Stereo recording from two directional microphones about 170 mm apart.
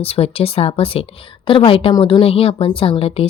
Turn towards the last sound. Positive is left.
turn(degrees=35)  # may be behind; listen again after turning